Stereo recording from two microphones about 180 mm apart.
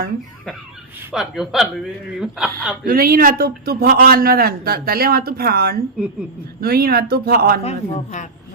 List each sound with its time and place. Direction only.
1.1 s a man's voice: centre (ahead or behind)
2.8 s a man's voice: 55° right (ahead or behind)
7.6 s a woman's voice: 40° left (ahead or behind)